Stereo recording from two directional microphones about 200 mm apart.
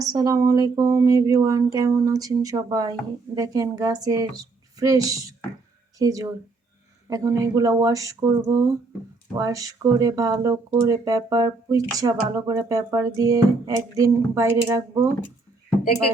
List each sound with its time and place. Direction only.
0.0 s a woman's voice: 20° right (ahead or behind)